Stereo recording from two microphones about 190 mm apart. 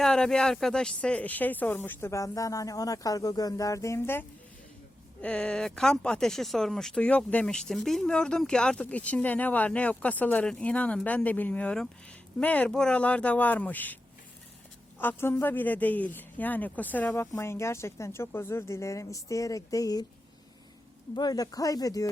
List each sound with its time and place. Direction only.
0.0 s a man's voice: 5° left (ahead or behind); by 20.1 s 20° left (ahead or behind)
21.2 s speech: 20° left (ahead or behind)